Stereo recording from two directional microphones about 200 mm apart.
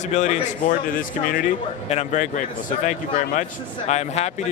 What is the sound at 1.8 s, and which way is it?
Speech, 35° left (ahead or behind).